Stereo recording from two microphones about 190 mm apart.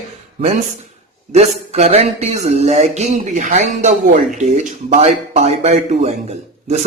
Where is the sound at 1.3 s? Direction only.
35° right (ahead or behind).